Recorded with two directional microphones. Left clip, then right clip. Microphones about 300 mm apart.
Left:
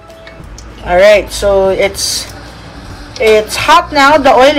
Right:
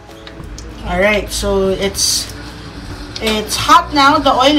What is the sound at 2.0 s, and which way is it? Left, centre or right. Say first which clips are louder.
A woman's voice: even; centre.